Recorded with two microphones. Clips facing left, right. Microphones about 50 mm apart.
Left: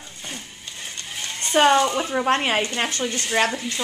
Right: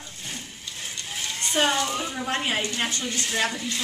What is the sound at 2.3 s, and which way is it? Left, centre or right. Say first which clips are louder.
Speech: left 5 dB; left.